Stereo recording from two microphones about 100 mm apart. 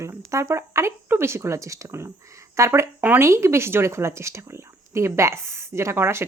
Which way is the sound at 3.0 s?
20° right (ahead or behind).